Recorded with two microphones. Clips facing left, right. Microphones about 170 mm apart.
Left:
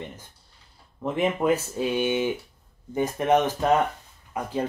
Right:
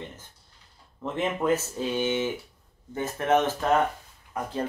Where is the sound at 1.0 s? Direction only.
15° left (ahead or behind).